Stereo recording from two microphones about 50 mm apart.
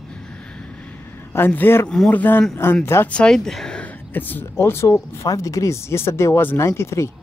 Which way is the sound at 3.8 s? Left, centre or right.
Left.